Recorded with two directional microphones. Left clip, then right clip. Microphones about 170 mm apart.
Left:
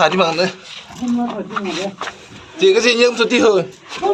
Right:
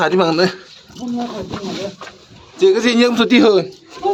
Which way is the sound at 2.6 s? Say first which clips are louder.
Left 1 dB; 60° right (ahead or behind).